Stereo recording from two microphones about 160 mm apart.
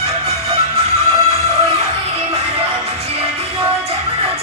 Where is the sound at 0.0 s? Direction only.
40° right (ahead or behind).